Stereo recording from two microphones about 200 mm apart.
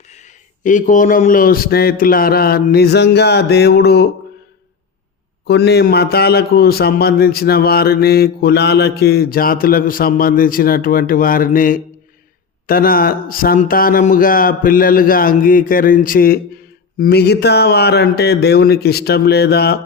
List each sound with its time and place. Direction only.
0.1 s a man's voice: 40° left (ahead or behind); by 4.1 s 55° left (ahead or behind)
5.5 s a man's voice: 55° left (ahead or behind)